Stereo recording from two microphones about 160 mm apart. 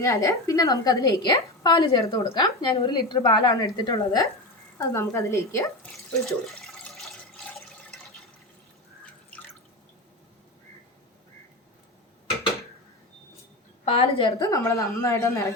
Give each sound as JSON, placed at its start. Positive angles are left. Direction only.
{"t": 0.0, "sound": "a woman's voice", "side_deg": 20}
{"t": 6.4, "sound": "water", "side_deg": 0}
{"t": 13.8, "sound": "a woman's voice", "side_deg": 40}
{"t": 14.3, "sound": "a woman's voice", "side_deg": 20}